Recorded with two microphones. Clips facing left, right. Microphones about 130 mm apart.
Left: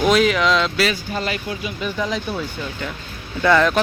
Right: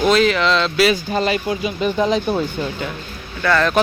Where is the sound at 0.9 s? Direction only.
20° right (ahead or behind).